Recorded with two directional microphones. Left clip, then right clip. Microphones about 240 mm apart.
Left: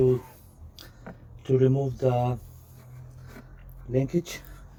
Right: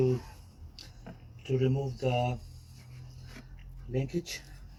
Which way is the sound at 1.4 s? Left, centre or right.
Left.